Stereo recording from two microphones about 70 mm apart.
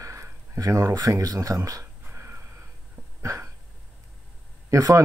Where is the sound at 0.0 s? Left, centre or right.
Right.